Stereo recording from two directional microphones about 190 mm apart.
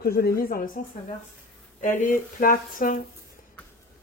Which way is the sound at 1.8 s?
45° left (ahead or behind).